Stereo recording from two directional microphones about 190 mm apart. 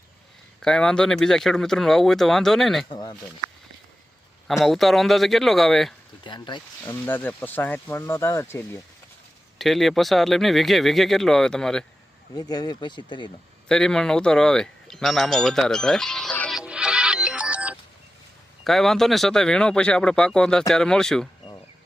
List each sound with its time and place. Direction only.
0.6 s speech: 5° left (ahead or behind)
2.9 s speech: 20° left (ahead or behind)
4.4 s speech: centre (ahead or behind)
6.2 s speech: 25° left (ahead or behind)
6.8 s speech: 10° left (ahead or behind)
9.6 s speech: centre (ahead or behind)
12.3 s speech: 20° left (ahead or behind)
13.7 s speech: 5° left (ahead or behind)